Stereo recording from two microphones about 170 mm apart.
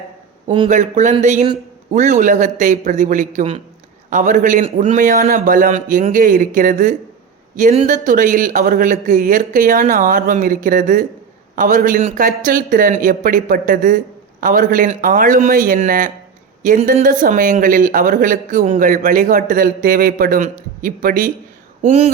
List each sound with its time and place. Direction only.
0.7 s a man's voice: 45° right (ahead or behind)